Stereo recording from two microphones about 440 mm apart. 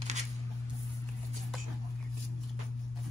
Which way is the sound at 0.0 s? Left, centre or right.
Centre.